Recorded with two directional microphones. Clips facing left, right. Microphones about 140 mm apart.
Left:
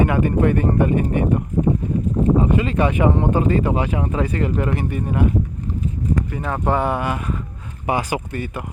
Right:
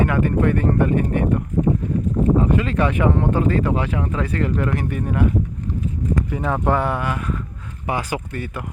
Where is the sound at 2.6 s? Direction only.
10° left (ahead or behind).